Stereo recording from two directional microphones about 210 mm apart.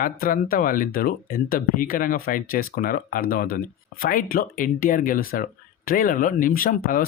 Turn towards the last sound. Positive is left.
turn(degrees=45)  # may be behind; listen again after turning